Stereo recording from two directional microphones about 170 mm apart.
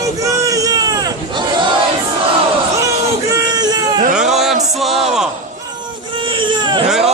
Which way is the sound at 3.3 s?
25° right (ahead or behind).